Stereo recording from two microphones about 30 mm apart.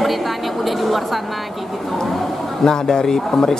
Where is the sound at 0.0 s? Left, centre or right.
Centre.